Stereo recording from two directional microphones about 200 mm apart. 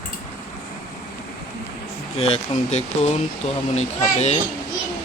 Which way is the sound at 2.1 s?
30° left (ahead or behind).